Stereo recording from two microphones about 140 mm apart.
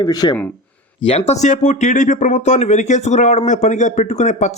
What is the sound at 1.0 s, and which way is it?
Speech, 50° left (ahead or behind).